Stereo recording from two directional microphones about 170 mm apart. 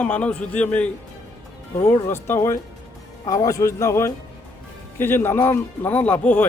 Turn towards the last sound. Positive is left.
turn(degrees=10)  # may be behind; listen again after turning